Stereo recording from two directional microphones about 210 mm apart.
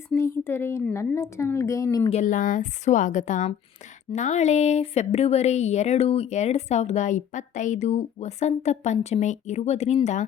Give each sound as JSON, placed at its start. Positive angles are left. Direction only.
{"t": 0.1, "sound": "speech", "side_deg": 10}
{"t": 2.0, "sound": "speech", "side_deg": 35}